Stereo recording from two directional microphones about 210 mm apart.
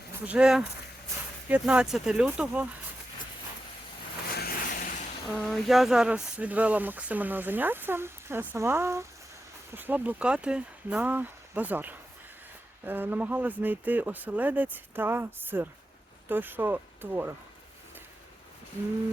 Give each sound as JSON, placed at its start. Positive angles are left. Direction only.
{"t": 0.3, "sound": "speech", "side_deg": -5}
{"t": 4.3, "sound": "a sound", "side_deg": 50}
{"t": 5.5, "sound": "speech", "side_deg": 0}